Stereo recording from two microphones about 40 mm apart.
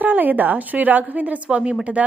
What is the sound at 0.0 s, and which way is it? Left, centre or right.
A woman's voice, right.